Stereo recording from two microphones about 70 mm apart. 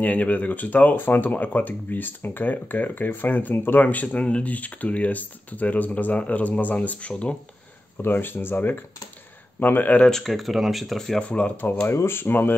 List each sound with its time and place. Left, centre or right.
0.0 s speech: centre
8.0 s speech: left
10.0 s speech: centre
11.2 s speech: centre
11.9 s speech: left